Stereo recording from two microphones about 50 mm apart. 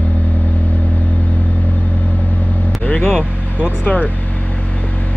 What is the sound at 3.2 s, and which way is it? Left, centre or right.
Vehicle, right.